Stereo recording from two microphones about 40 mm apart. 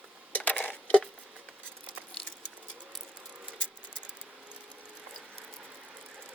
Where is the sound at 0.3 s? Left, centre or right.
Left.